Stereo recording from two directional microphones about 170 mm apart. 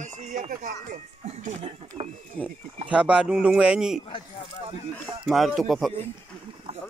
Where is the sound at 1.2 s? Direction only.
35° right (ahead or behind).